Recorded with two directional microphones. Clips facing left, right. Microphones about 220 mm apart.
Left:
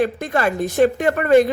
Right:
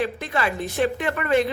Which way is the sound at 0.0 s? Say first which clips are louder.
Left 6 dB; 45° left (ahead or behind).